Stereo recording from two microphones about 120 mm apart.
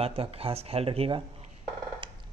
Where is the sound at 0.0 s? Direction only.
55° right (ahead or behind).